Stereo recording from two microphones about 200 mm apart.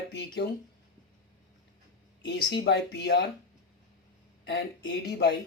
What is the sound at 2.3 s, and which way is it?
Speech, 60° left (ahead or behind).